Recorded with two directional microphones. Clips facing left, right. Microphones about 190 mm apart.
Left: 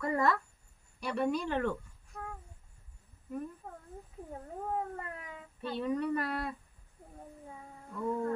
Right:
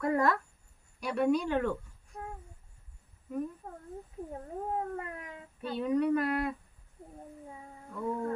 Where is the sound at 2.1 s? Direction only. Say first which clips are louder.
Right 1 dB; 20° right (ahead or behind).